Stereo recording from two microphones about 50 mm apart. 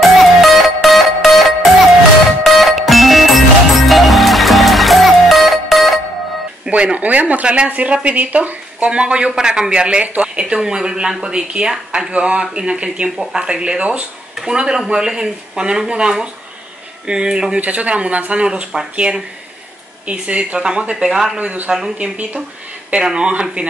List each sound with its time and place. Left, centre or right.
0.2 s music: centre
6.7 s speech: right
10.6 s speech: centre
17.6 s speech: right; by 21.4 s centre
21.4 s speech: right
21.6 s speech: centre
21.9 s speech: right